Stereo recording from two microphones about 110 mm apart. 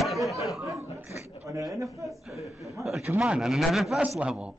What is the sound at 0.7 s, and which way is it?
Speech, 30° right (ahead or behind).